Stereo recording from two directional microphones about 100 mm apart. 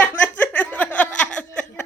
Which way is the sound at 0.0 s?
20° left (ahead or behind).